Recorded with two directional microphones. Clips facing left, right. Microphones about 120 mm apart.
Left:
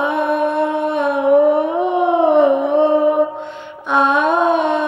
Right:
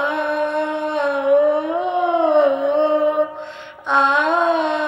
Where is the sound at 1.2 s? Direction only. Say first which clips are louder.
Left 3 dB; 25° left (ahead or behind).